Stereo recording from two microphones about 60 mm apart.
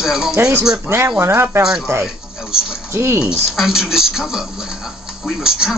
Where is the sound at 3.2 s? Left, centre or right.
Centre.